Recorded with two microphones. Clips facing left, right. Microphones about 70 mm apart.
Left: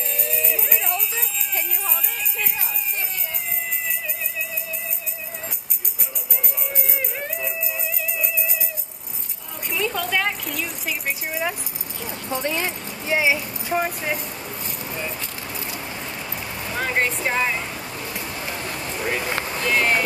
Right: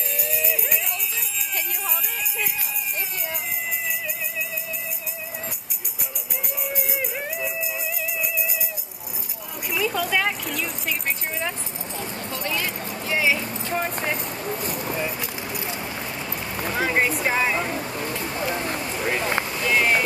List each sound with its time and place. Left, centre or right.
0.1 s music: centre
6.6 s music: centre
9.7 s a sound: centre
12.3 s speech: left
15.0 s vehicle: centre
16.7 s speech: centre
17.6 s vehicle: right
18.3 s a sound: right
18.8 s a sound: centre
19.6 s speech: centre